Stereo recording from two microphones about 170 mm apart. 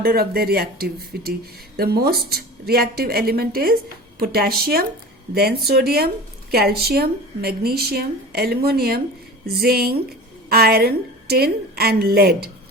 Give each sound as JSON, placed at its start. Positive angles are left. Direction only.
{"t": 0.0, "sound": "speech", "side_deg": -60}